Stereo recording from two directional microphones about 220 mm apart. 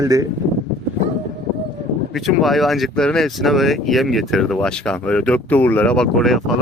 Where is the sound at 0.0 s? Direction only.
15° right (ahead or behind).